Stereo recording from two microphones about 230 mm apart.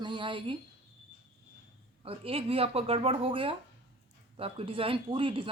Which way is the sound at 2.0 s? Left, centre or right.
Right.